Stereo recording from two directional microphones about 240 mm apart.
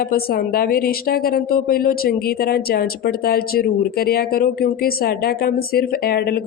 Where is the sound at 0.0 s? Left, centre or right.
Left.